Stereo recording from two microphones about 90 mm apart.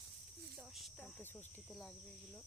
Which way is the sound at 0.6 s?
Centre (ahead or behind).